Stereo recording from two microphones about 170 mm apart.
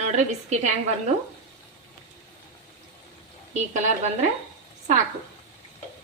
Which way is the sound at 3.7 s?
45° right (ahead or behind).